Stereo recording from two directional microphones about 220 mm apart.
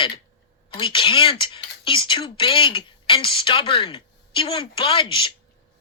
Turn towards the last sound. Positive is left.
turn(degrees=25)  # may be behind; listen again after turning